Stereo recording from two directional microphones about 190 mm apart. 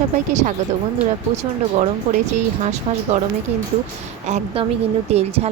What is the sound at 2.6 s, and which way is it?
Speech, 35° right (ahead or behind).